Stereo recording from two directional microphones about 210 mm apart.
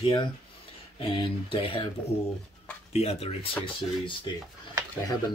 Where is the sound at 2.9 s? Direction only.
30° left (ahead or behind).